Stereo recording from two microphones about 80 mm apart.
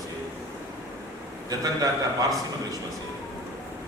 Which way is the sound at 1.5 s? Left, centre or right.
Right.